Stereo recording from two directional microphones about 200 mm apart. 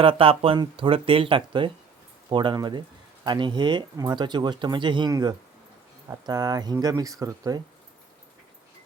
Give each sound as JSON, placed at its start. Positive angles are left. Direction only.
{"t": 0.0, "sound": "speech", "side_deg": -25}